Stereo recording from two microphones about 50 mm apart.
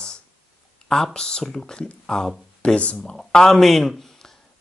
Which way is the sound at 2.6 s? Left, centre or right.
Left.